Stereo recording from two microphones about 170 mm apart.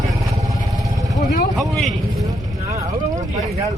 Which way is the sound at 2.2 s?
20° right (ahead or behind).